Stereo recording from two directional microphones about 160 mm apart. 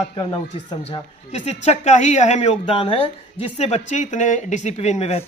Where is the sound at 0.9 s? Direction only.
40° left (ahead or behind).